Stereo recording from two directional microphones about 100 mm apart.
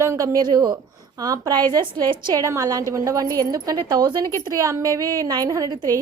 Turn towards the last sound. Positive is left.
turn(degrees=-35)  # may be behind; listen again after turning